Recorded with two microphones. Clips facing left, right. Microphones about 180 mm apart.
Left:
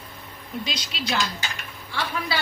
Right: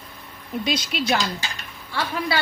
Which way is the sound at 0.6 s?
55° right (ahead or behind).